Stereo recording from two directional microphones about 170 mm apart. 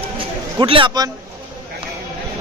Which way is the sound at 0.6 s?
30° right (ahead or behind).